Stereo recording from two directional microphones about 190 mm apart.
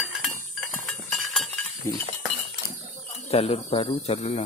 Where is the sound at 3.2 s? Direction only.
30° left (ahead or behind).